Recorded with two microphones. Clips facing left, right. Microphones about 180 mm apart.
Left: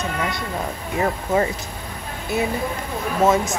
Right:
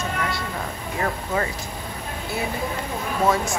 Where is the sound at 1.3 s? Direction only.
25° left (ahead or behind).